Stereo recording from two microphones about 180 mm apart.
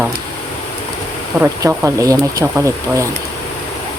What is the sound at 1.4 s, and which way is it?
Speech, 15° right (ahead or behind).